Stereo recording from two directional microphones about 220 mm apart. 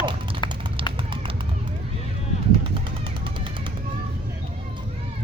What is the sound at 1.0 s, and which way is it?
Run, 25° right (ahead or behind).